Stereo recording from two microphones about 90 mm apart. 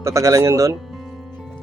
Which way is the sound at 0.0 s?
35° right (ahead or behind).